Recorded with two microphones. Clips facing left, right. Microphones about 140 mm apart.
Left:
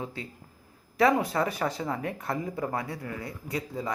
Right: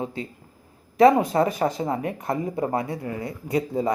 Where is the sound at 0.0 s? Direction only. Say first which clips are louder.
Right 6 dB; 20° right (ahead or behind).